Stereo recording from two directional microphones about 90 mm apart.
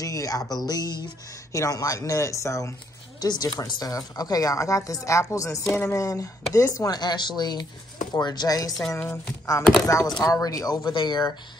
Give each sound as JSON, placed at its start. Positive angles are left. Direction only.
{"t": 0.0, "sound": "a woman's voice", "side_deg": 40}
{"t": 3.2, "sound": "a woman's voice", "side_deg": 45}
{"t": 5.7, "sound": "speech", "side_deg": 25}
{"t": 5.9, "sound": "speech", "side_deg": 35}
{"t": 6.9, "sound": "a woman's voice", "side_deg": 50}
{"t": 9.8, "sound": "a woman's voice", "side_deg": 35}